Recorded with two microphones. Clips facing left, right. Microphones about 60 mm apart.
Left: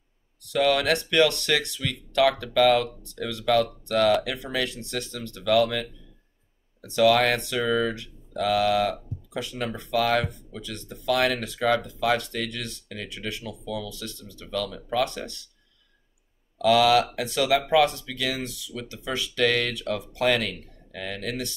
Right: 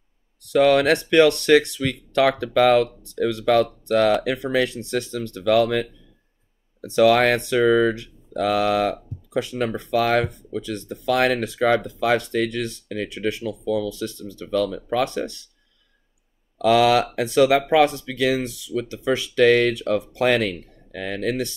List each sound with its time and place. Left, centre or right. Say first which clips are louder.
0.5 s speech: right 6 dB; right
7.0 s speech: right 4 dB; right
16.6 s speech: right 2 dB; right